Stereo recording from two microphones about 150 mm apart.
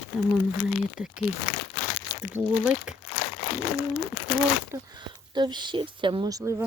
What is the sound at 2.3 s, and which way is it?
Speech, 15° right (ahead or behind).